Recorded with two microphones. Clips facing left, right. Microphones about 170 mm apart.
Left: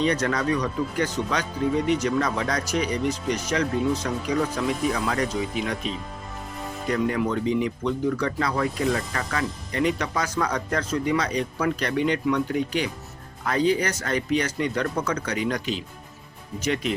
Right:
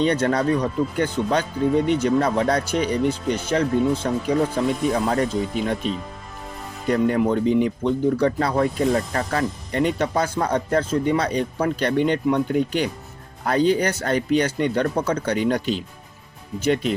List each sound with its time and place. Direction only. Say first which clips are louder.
0.0 s speech: right 4 dB; 30° right (ahead or behind)
5.3 s speech: right 3 dB; 5° left (ahead or behind)
6.8 s speech: right 5 dB; 35° right (ahead or behind)